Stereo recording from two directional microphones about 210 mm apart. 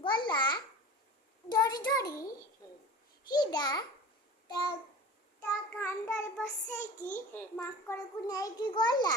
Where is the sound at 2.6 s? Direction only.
15° left (ahead or behind).